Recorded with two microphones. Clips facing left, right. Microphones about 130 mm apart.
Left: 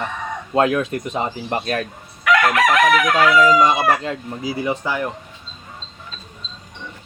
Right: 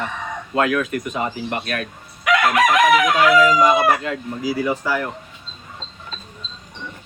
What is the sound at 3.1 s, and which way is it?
Speech, 30° left (ahead or behind).